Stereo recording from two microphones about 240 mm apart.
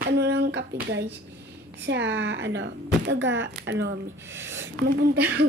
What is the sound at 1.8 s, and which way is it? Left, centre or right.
Speech, right.